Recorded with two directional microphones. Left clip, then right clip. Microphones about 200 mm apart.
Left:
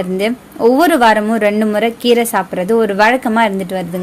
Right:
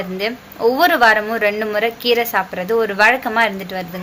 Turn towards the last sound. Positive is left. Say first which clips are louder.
# left 3 dB
turn(degrees=40)  # may be behind; listen again after turning